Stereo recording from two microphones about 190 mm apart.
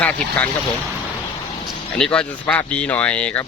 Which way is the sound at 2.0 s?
5° left (ahead or behind).